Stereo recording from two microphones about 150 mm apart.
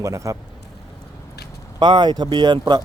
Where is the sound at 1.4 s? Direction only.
90° left.